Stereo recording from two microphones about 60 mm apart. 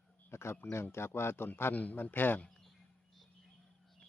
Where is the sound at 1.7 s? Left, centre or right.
Left.